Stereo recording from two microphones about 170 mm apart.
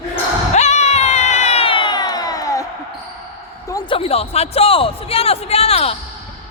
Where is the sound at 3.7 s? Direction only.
25° left (ahead or behind).